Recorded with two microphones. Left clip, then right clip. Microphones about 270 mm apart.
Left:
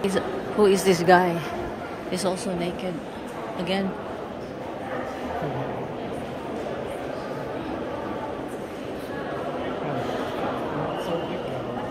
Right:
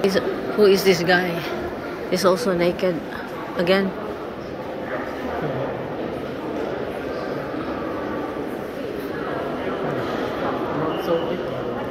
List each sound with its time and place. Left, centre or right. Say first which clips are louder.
0.0 s a woman's voice: right 5 dB; centre
2.0 s a woman's voice: right 9 dB; centre